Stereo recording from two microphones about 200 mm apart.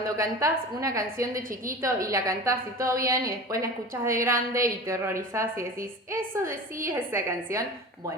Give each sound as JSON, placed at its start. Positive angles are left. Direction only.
{"t": 0.2, "sound": "a woman's voice", "side_deg": -15}
{"t": 1.4, "sound": "a woman's voice", "side_deg": -45}
{"t": 1.8, "sound": "a woman's voice", "side_deg": -15}